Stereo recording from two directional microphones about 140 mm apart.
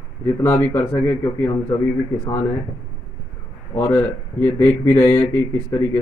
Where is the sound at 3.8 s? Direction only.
15° left (ahead or behind).